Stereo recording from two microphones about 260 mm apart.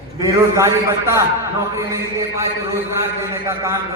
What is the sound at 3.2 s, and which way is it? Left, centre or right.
Speech, centre.